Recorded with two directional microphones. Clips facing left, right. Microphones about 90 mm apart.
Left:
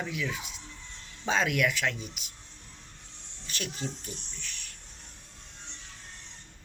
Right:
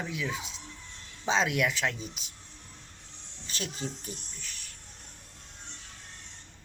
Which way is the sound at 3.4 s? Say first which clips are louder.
Even; 30° right (ahead or behind).